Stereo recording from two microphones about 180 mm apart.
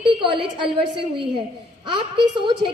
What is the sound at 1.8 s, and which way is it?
Speech, 25° right (ahead or behind).